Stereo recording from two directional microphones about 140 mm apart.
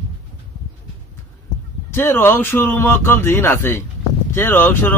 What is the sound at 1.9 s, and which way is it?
Speech, 15° left (ahead or behind).